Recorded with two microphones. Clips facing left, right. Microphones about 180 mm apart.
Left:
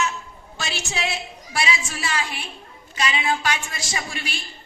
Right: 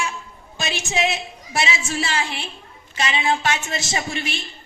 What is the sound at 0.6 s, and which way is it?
A woman's voice, 20° right (ahead or behind).